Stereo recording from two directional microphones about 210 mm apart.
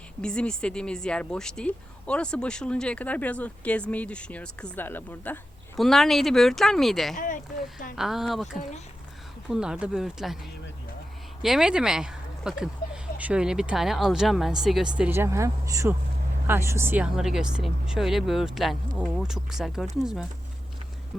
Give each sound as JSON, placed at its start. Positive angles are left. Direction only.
{"t": 0.2, "sound": "speech", "side_deg": 5}
{"t": 7.2, "sound": "speech", "side_deg": 40}
{"t": 7.9, "sound": "speech", "side_deg": 0}
{"t": 11.4, "sound": "speech", "side_deg": 0}